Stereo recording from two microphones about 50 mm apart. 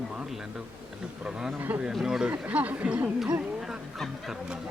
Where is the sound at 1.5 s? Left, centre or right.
Right.